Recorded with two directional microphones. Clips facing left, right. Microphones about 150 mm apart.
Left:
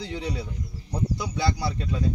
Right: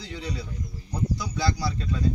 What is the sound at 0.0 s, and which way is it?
Speech, 20° left (ahead or behind).